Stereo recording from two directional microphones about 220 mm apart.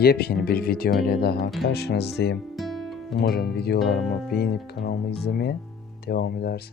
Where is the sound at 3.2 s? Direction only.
45° left (ahead or behind).